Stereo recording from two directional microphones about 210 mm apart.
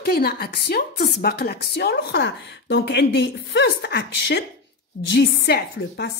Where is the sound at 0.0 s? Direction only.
50° left (ahead or behind).